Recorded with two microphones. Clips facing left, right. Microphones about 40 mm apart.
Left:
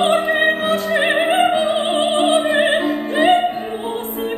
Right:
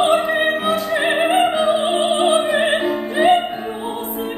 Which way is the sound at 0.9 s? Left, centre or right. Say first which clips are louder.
Even; left.